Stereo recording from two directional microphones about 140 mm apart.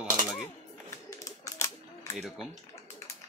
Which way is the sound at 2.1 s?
Centre (ahead or behind).